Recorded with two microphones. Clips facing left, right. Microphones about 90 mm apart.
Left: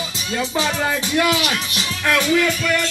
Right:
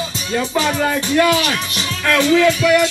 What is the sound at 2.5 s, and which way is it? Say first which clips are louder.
Speech: right 7 dB; 5° right (ahead or behind).